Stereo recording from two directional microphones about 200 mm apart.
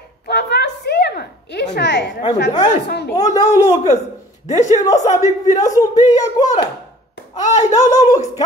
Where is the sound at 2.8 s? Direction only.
55° left (ahead or behind).